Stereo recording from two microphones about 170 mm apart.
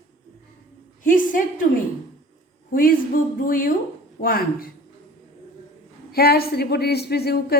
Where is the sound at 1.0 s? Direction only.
50° left (ahead or behind).